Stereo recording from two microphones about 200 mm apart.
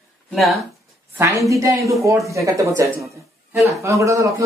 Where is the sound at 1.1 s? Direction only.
15° right (ahead or behind).